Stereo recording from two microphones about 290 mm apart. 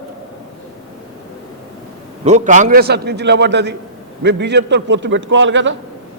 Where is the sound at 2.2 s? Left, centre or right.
Right.